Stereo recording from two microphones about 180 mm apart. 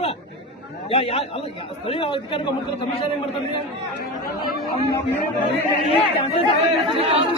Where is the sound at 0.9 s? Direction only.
30° left (ahead or behind).